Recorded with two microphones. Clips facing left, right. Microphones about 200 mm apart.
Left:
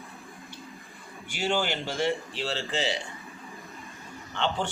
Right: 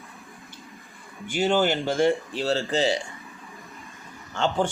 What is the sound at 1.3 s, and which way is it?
A man's voice, 50° right (ahead or behind).